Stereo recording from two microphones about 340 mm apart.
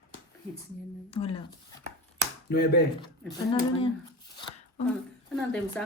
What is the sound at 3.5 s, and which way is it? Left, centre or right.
Speech, centre.